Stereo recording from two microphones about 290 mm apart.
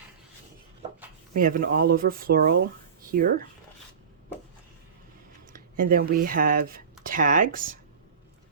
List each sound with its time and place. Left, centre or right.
1.3 s speech: right
5.5 s speech: right